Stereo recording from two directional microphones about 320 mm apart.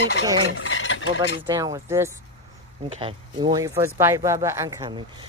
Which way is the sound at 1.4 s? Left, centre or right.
Centre.